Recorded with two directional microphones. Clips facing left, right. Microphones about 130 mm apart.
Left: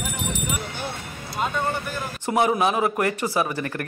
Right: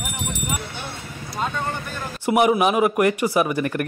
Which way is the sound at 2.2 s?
15° right (ahead or behind).